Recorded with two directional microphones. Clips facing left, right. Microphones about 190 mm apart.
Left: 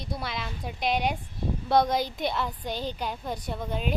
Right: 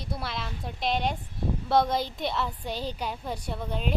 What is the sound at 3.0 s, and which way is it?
Speech, 5° right (ahead or behind).